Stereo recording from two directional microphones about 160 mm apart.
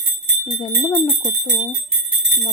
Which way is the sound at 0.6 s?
20° left (ahead or behind).